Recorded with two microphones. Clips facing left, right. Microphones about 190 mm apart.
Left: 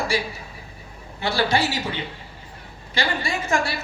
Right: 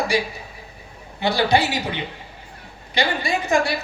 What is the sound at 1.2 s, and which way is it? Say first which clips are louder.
Speech: right 3 dB; 15° right (ahead or behind).